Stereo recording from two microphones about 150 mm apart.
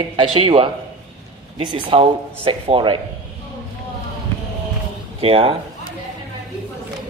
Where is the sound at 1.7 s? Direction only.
35° right (ahead or behind).